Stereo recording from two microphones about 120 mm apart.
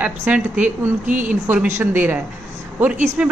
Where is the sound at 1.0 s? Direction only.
90° right.